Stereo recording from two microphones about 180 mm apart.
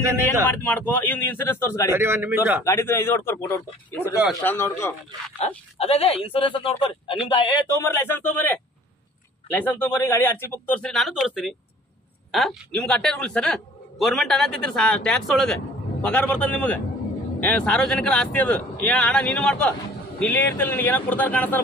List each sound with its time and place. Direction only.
0.5 s speech: 10° left (ahead or behind)
1.9 s a man's voice: 15° right (ahead or behind)
2.6 s speech: 15° left (ahead or behind)
5.8 s a man's voice: 35° left (ahead or behind)
7.7 s speech: 15° left (ahead or behind)
9.7 s a man's voice: 10° left (ahead or behind)